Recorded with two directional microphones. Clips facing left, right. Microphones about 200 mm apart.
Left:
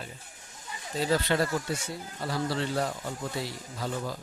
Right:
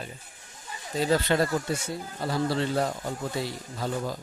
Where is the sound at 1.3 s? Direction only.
30° right (ahead or behind).